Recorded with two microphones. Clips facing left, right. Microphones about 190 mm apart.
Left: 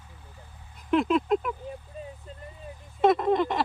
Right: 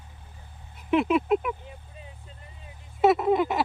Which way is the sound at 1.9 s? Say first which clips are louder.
Left 7 dB; 45° left (ahead or behind).